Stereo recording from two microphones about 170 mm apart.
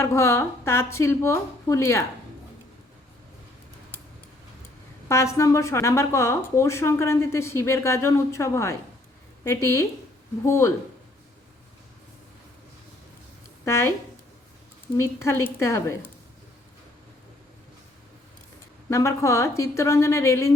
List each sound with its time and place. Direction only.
0.0 s speech: 15° left (ahead or behind)
5.0 s speech: 15° left (ahead or behind)
13.7 s speech: 15° left (ahead or behind)
14.9 s speech: 15° left (ahead or behind)
18.9 s speech: 15° left (ahead or behind)